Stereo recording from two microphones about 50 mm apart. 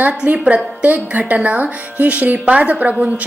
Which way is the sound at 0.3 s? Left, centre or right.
Right.